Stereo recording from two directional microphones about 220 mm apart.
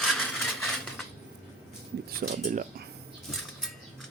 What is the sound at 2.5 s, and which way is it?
Speech, 40° right (ahead or behind).